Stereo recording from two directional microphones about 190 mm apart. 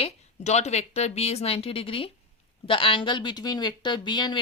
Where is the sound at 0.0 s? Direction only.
35° left (ahead or behind).